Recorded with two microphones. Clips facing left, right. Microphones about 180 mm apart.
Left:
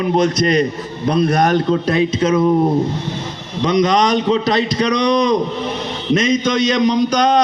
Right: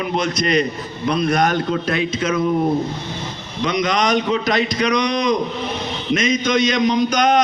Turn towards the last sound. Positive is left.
turn(degrees=35)  # may be behind; listen again after turning